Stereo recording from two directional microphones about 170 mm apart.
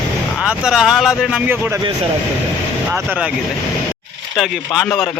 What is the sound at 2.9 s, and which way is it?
Speech, 10° right (ahead or behind).